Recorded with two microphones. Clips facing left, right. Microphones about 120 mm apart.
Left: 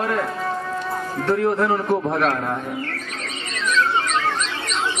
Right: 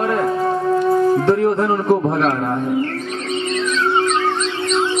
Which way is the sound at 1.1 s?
30° right (ahead or behind).